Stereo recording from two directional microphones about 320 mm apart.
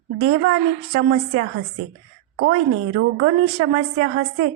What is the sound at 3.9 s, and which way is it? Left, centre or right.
Speech, right.